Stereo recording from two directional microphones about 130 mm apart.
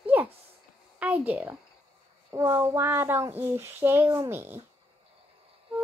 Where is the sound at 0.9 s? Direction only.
10° right (ahead or behind).